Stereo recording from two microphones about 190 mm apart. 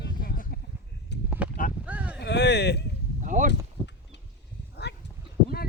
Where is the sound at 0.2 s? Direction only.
45° left (ahead or behind).